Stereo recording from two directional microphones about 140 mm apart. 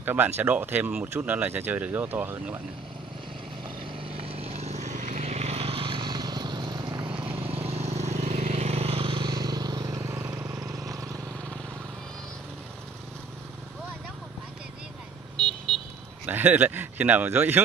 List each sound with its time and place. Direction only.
0.0 s speech: 15° right (ahead or behind)
4.2 s vehicle: 45° right (ahead or behind)
7.2 s vehicle: 45° right (ahead or behind); by 10.7 s 15° right (ahead or behind)
15.3 s vehicle: 5° left (ahead or behind)
16.3 s speech: 10° right (ahead or behind)